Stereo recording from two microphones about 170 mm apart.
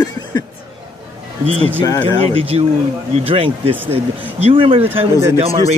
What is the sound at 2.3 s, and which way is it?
Speech, 35° right (ahead or behind).